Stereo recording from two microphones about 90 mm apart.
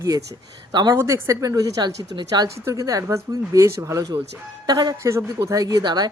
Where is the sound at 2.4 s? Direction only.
35° right (ahead or behind).